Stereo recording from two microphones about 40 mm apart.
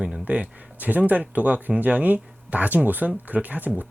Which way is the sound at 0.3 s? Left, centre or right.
Right.